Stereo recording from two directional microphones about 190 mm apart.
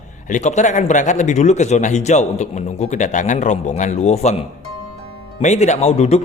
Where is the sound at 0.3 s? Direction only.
40° left (ahead or behind).